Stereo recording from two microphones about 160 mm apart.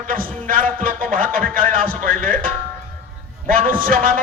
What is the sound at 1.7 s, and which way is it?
Speech, 60° right (ahead or behind).